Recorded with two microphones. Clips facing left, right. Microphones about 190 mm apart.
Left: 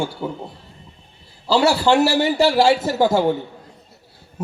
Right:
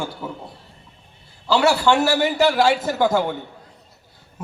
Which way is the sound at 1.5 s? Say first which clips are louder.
Left 1 dB; 35° left (ahead or behind).